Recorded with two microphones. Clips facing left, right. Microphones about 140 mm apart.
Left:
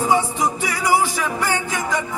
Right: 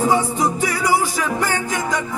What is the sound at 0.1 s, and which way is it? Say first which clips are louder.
Music: right 1 dB; 40° right (ahead or behind).